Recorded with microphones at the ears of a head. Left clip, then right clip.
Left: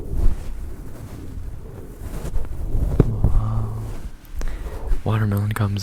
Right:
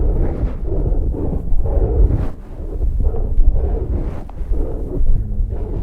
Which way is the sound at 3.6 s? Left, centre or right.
Right.